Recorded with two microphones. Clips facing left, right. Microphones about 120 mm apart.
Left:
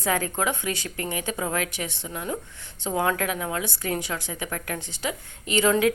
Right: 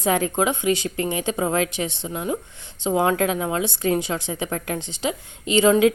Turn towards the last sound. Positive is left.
turn(degrees=-20)  # may be behind; listen again after turning